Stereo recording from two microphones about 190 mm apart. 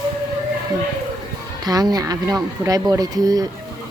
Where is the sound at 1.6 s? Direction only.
20° right (ahead or behind).